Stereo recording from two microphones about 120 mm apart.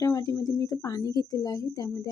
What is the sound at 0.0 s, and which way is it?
A woman's voice, 25° left (ahead or behind).